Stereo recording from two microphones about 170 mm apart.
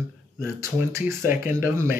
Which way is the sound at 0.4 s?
15° right (ahead or behind).